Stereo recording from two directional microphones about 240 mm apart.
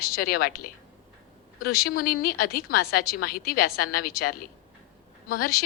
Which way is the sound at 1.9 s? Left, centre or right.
Left.